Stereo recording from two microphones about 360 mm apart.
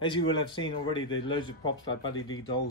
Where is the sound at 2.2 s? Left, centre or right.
Left.